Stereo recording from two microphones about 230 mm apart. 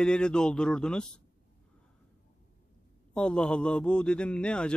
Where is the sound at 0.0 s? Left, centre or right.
Centre.